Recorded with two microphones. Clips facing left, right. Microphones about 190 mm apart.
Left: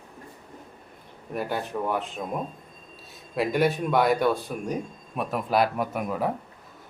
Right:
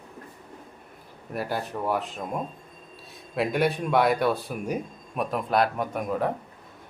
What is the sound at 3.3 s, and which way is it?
Speech, centre (ahead or behind).